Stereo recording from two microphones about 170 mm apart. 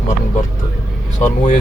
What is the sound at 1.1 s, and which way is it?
Speech, 45° left (ahead or behind).